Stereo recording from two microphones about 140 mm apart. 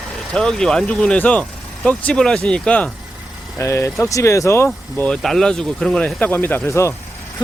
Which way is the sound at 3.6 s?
20° left (ahead or behind).